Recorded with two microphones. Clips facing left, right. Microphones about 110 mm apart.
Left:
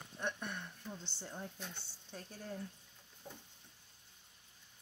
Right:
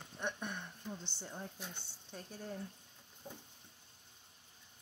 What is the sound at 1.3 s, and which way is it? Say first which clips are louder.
A woman's voice: left 1 dB; 5° right (ahead or behind).